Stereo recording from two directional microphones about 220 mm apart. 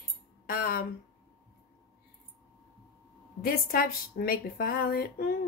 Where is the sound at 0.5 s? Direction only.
40° left (ahead or behind).